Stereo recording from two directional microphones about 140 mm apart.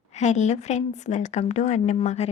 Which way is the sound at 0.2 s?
55° left (ahead or behind).